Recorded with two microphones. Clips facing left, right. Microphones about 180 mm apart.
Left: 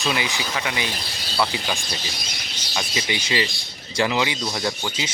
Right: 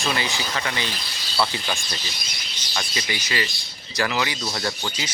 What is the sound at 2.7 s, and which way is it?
Speech, 15° left (ahead or behind).